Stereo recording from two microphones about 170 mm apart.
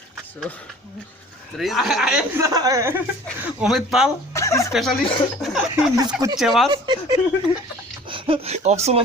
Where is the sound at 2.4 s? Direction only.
20° right (ahead or behind).